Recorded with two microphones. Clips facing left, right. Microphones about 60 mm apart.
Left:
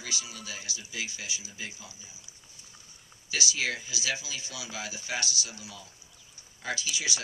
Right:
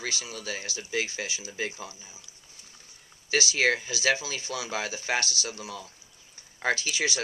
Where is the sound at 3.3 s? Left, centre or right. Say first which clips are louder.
Right 7 dB; right.